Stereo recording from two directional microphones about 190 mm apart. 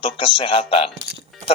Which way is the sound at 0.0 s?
30° left (ahead or behind).